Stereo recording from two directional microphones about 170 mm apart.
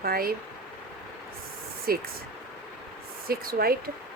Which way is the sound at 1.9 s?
60° right (ahead or behind).